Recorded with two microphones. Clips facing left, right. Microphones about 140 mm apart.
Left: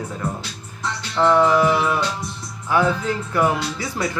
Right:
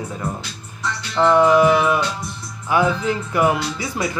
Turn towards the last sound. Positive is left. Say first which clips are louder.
# right 1 dB
turn(degrees=-15)  # may be behind; listen again after turning